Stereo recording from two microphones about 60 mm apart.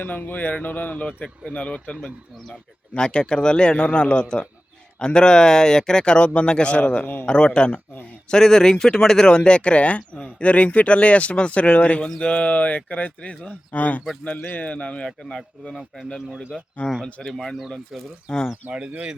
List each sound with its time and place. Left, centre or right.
0.0 s a man's voice: left; by 18.0 s centre
18.3 s a man's voice: centre
18.7 s speech: centre